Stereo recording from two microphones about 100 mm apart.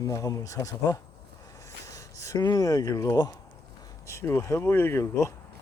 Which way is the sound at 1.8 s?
30° left (ahead or behind).